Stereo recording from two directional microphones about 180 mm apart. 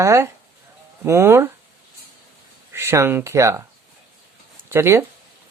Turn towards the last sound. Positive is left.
turn(degrees=-15)  # may be behind; listen again after turning